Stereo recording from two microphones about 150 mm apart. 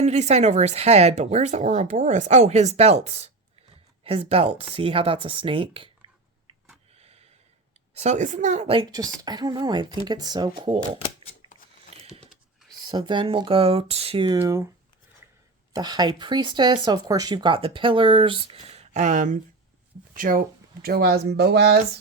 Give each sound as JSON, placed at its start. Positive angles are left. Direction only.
{"t": 0.0, "sound": "speech", "side_deg": -50}
{"t": 6.9, "sound": "gasp", "side_deg": -45}
{"t": 7.9, "sound": "speech", "side_deg": -50}
{"t": 8.9, "sound": "speech", "side_deg": -25}
{"t": 11.9, "sound": "a sound", "side_deg": -40}
{"t": 12.8, "sound": "speech", "side_deg": -30}
{"t": 14.3, "sound": "speech", "side_deg": -20}
{"t": 15.7, "sound": "speech", "side_deg": -30}
{"t": 20.8, "sound": "speech", "side_deg": -90}